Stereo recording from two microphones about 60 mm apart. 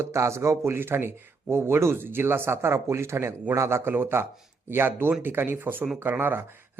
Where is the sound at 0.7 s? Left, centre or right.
Right.